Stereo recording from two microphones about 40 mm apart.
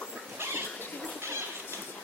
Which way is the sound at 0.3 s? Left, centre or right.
Right.